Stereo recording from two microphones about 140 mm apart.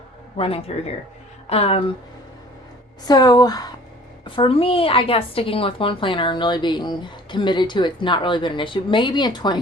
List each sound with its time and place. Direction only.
0.3 s speech: 40° left (ahead or behind)
3.1 s a woman's voice: 30° left (ahead or behind)